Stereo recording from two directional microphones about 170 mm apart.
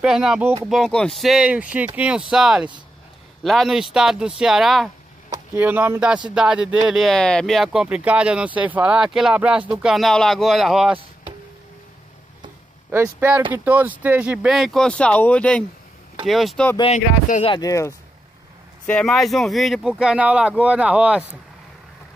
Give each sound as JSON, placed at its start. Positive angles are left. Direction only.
{"t": 0.0, "sound": "speech", "side_deg": -5}
{"t": 0.7, "sound": "speech", "side_deg": 5}
{"t": 5.3, "sound": "speech", "side_deg": -10}
{"t": 12.9, "sound": "speech", "side_deg": -10}
{"t": 16.9, "sound": "speech", "side_deg": 45}
{"t": 17.5, "sound": "speech", "side_deg": 20}
{"t": 18.9, "sound": "speech", "side_deg": 5}